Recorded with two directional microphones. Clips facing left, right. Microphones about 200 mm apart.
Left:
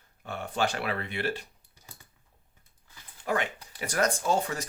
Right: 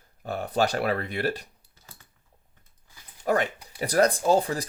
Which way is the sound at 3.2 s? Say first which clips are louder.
Right 5 dB; 40° right (ahead or behind).